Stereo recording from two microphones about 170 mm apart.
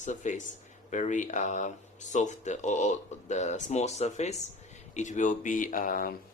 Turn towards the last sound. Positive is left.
turn(degrees=55)  # may be behind; listen again after turning